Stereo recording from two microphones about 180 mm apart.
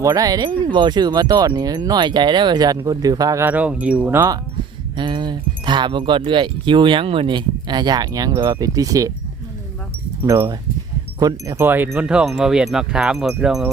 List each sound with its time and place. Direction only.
0.0 s speech: 20° right (ahead or behind)
4.9 s speech: 25° right (ahead or behind)
10.2 s speech: 15° right (ahead or behind)
11.2 s wind chime: 20° right (ahead or behind); by 13.7 s 5° right (ahead or behind)